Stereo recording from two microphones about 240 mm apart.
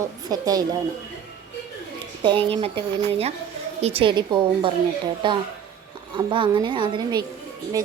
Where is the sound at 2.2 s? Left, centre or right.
Right.